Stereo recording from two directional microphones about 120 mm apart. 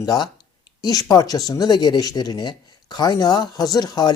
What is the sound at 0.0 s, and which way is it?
Speech, 35° left (ahead or behind).